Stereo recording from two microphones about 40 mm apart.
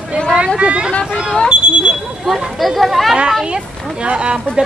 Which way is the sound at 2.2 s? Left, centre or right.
Centre.